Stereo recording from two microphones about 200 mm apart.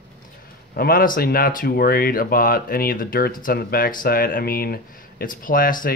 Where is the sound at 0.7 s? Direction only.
50° left (ahead or behind).